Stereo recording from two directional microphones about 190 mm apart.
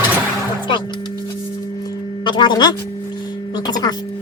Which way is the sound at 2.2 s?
25° left (ahead or behind).